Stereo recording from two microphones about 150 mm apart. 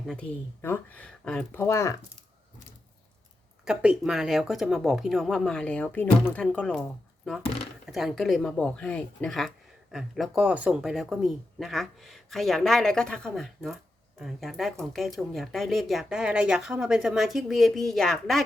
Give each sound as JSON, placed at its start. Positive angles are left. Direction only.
{"t": 0.6, "sound": "speech", "side_deg": 15}
{"t": 1.6, "sound": "speech", "side_deg": 20}
{"t": 3.7, "sound": "speech", "side_deg": -5}
{"t": 7.9, "sound": "speech", "side_deg": 0}